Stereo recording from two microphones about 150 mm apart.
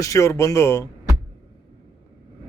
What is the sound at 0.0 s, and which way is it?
Speech, 20° left (ahead or behind).